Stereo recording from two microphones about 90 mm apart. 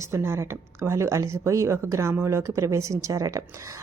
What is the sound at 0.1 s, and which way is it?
A woman's voice, 30° right (ahead or behind).